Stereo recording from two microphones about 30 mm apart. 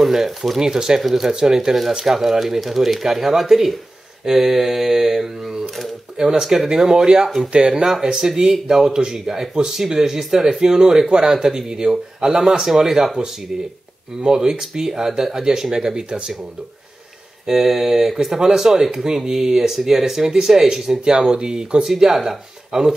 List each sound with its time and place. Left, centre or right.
0.0 s speech: centre
0.6 s speech: right
1.0 s speech: centre
1.3 s speech: right
6.7 s speech: right
12.8 s speech: centre
14.2 s speech: right
14.5 s speech: centre
16.1 s speech: right
17.5 s speech: centre
21.9 s speech: centre